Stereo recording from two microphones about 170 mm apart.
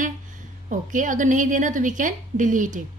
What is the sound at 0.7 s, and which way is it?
A woman's voice, 50° right (ahead or behind).